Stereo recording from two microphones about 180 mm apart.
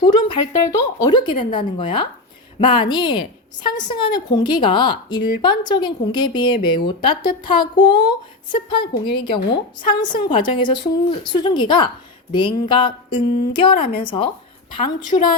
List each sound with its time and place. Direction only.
0.0 s a woman's voice: 20° left (ahead or behind)